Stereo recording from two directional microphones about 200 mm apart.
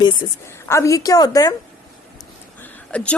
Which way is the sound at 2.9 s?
5° left (ahead or behind).